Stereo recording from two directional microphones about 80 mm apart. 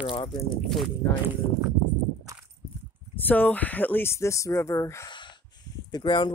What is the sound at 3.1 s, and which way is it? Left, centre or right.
Speech, left.